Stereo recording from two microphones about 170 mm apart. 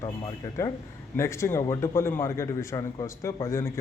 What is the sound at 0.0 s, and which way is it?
A man's voice, 20° left (ahead or behind).